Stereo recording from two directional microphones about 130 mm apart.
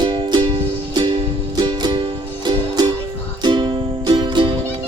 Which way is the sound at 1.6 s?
35° right (ahead or behind).